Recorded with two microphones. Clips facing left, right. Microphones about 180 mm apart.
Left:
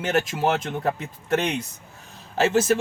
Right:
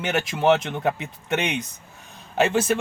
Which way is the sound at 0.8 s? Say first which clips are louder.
Right 1 dB; 75° right (ahead or behind).